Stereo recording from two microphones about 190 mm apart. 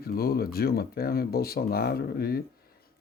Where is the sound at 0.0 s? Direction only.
55° left (ahead or behind).